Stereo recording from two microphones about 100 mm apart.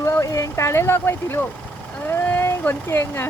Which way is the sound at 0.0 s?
30° left (ahead or behind).